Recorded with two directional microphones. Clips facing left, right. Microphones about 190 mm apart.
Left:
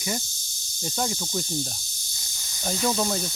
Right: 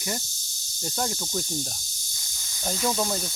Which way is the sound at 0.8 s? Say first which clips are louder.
Left 1 dB; 5° left (ahead or behind).